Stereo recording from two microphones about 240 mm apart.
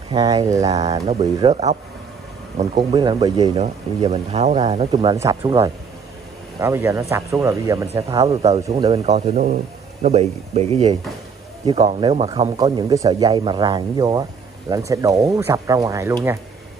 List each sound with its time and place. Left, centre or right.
0.1 s speech: centre
2.9 s speech: centre
5.1 s speech: centre
8.8 s speech: right; by 16.3 s centre